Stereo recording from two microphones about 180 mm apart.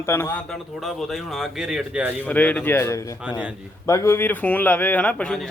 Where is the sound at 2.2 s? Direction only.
10° left (ahead or behind).